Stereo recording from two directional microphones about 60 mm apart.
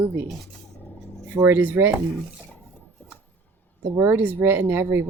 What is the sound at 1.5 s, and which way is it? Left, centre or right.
Speech, right.